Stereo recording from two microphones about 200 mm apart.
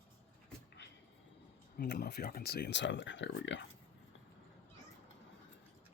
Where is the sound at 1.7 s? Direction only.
50° left (ahead or behind).